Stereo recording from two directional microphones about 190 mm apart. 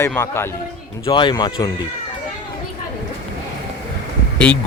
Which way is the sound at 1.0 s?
25° left (ahead or behind).